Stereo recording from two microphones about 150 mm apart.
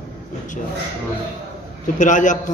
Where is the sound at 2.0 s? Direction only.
60° left (ahead or behind).